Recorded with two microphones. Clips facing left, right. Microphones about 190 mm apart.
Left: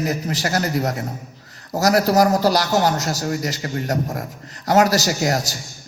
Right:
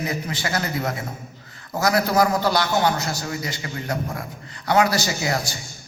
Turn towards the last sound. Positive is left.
turn(degrees=40)  # may be behind; listen again after turning